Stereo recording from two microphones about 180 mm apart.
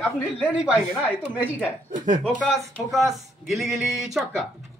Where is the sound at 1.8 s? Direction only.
45° right (ahead or behind).